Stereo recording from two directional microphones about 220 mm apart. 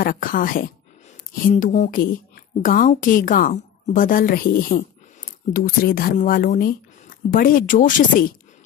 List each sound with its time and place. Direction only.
0.0 s a woman's voice: 40° left (ahead or behind)